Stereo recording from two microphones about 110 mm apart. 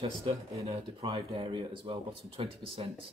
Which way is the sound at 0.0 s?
55° right (ahead or behind).